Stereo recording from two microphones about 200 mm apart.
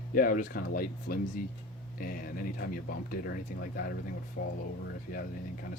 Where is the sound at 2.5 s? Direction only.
50° left (ahead or behind).